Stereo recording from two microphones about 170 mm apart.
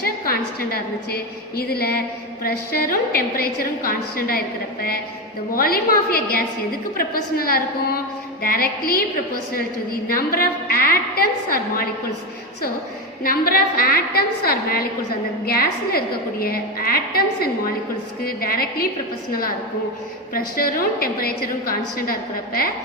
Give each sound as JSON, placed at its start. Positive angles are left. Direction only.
{"t": 0.0, "sound": "a woman's voice", "side_deg": 60}
{"t": 13.2, "sound": "a woman's voice", "side_deg": 60}
{"t": 20.3, "sound": "a woman's voice", "side_deg": 60}